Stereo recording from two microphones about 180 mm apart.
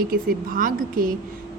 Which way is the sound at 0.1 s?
50° right (ahead or behind).